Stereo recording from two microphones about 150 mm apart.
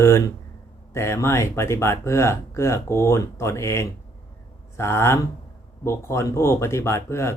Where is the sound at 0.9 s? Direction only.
15° left (ahead or behind).